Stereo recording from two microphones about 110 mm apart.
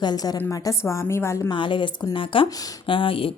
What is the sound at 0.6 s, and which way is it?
Speech, 25° left (ahead or behind).